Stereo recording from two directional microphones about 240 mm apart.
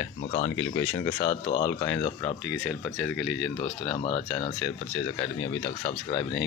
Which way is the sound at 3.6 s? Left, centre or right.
Left.